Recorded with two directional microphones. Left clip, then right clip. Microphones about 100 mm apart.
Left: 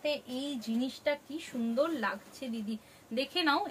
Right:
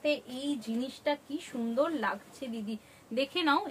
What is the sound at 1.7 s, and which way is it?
A woman's voice, 30° right (ahead or behind).